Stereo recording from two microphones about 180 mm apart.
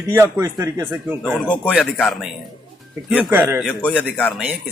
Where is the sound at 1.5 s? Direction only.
10° left (ahead or behind).